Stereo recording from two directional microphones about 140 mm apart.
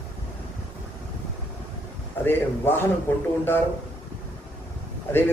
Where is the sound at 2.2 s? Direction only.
15° left (ahead or behind).